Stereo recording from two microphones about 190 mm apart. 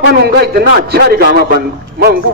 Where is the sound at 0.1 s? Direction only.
55° right (ahead or behind).